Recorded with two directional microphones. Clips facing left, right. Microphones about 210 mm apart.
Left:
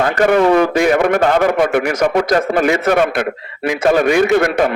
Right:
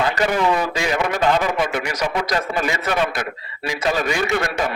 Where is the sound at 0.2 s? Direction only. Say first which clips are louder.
Left 12 dB; 60° left (ahead or behind).